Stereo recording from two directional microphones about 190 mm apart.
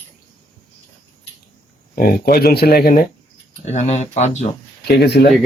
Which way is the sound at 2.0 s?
55° left (ahead or behind).